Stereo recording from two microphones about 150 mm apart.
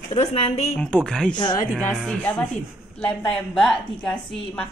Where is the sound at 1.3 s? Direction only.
30° left (ahead or behind).